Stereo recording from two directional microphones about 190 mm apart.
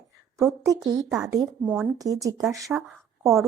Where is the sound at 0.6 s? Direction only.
20° right (ahead or behind).